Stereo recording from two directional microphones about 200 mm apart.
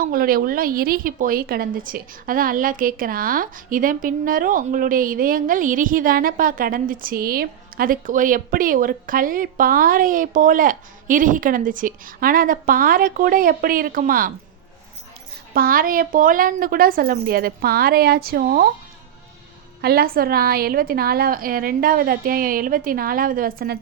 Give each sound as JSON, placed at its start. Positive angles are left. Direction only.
{"t": 0.0, "sound": "a woman's voice", "side_deg": -45}
{"t": 15.5, "sound": "a woman's voice", "side_deg": -45}
{"t": 19.8, "sound": "a woman's voice", "side_deg": -50}